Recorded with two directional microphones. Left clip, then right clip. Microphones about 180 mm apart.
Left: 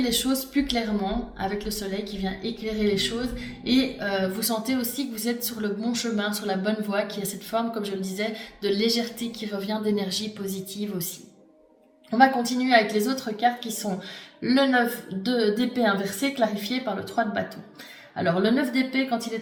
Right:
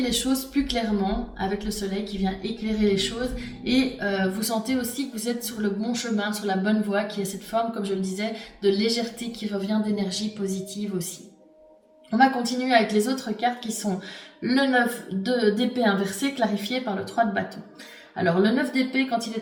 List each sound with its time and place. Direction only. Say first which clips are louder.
0.0 s speech: even; 40° left (ahead or behind)
12.1 s speech: left 1 dB; 40° left (ahead or behind)
18.2 s speech: right 1 dB; 40° left (ahead or behind)